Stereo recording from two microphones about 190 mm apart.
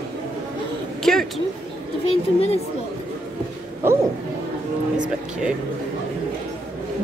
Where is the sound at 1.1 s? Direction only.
Centre (ahead or behind).